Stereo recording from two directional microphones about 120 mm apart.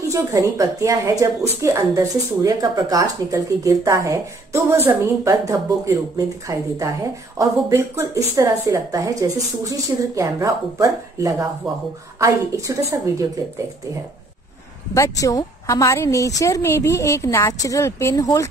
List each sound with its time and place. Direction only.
0.1 s a woman's voice: 30° right (ahead or behind)
11.6 s speech: centre (ahead or behind)
12.2 s a woman's voice: 25° right (ahead or behind)
15.0 s a woman's voice: 30° left (ahead or behind)